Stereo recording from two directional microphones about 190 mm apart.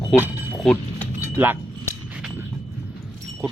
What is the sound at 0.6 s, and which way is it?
Keys jangling, 5° left (ahead or behind).